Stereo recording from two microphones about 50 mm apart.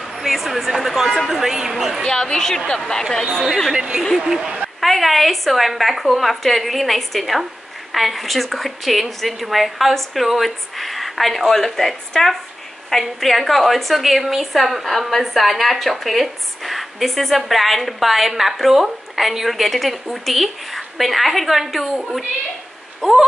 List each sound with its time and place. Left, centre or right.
0.2 s a woman's voice: centre
2.0 s a woman's voice: centre
3.7 s a woman's voice: centre
4.7 s a woman's voice: centre